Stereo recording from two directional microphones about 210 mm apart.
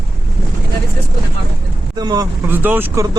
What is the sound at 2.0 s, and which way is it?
Speech, 20° right (ahead or behind).